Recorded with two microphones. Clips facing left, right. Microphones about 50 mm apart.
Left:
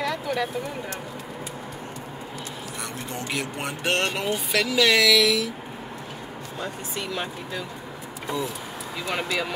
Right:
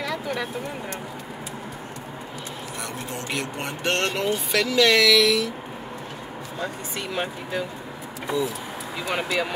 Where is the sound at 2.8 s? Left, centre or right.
Centre.